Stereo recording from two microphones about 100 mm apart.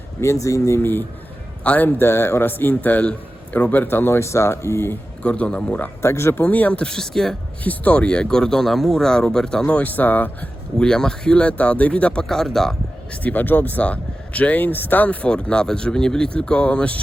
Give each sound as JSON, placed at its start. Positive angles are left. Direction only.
{"t": 0.2, "sound": "a man's voice", "side_deg": 30}
{"t": 5.2, "sound": "speech", "side_deg": 10}
{"t": 6.0, "sound": "speech", "side_deg": 25}
{"t": 7.6, "sound": "speech", "side_deg": 15}
{"t": 13.2, "sound": "speech", "side_deg": 20}